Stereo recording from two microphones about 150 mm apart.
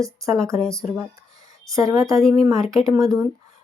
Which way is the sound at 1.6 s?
20° right (ahead or behind).